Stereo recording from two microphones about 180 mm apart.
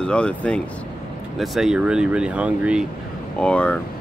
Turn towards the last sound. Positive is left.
turn(degrees=5)  # may be behind; listen again after turning